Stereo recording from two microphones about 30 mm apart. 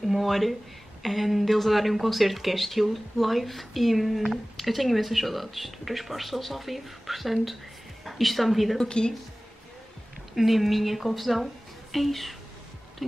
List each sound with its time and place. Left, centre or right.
0.0 s a sound: centre
0.3 s a woman's voice: centre
8.7 s a woman's voice: left
10.3 s a woman's voice: centre